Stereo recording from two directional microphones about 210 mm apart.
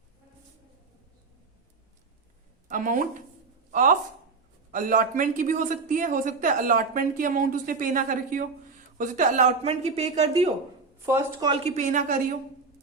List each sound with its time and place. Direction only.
2.6 s a woman's voice: 40° right (ahead or behind)
11.0 s speech: 15° right (ahead or behind)
11.6 s a woman's voice: 35° right (ahead or behind)